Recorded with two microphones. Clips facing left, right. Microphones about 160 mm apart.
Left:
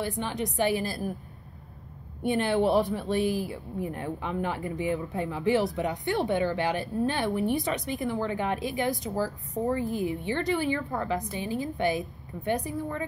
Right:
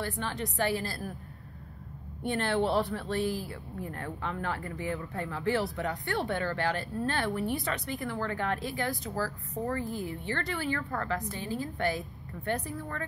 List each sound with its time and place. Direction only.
0.0 s speech: 15° left (ahead or behind)
2.2 s speech: 15° left (ahead or behind)